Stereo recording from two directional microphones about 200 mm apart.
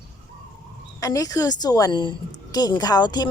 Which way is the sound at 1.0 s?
15° left (ahead or behind).